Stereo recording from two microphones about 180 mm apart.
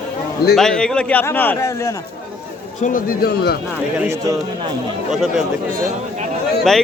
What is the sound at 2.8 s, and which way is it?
Speech, 50° left (ahead or behind).